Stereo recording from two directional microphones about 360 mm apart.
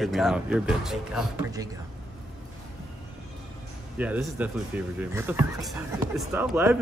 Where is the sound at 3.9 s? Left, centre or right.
Centre.